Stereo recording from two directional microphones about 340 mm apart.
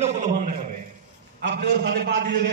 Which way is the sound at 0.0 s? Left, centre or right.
Centre.